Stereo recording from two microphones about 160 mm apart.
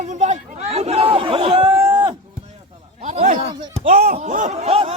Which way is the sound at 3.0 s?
45° right (ahead or behind).